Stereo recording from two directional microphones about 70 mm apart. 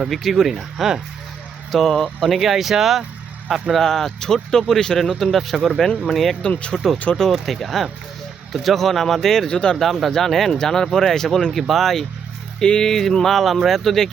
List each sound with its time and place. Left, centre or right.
0.1 s speech: centre
1.7 s speech: centre
6.4 s speech: centre
6.7 s speech: centre
9.5 s speech: centre
9.7 s speech: centre